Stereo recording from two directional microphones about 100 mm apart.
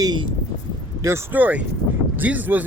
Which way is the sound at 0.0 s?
45° right (ahead or behind).